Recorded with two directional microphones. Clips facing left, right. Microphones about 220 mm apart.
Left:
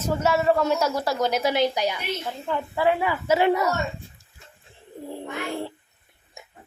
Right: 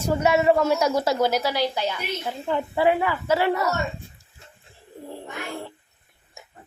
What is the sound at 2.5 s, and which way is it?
Speech, 15° right (ahead or behind).